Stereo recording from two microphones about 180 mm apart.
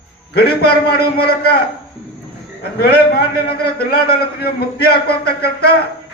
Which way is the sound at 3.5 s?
60° left (ahead or behind).